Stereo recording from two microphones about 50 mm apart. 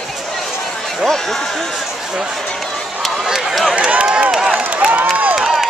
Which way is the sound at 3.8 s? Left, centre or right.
Right.